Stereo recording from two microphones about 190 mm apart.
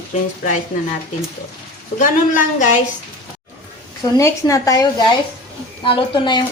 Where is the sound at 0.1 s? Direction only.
40° left (ahead or behind).